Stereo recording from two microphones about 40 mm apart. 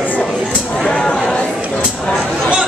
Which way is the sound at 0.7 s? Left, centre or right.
Centre.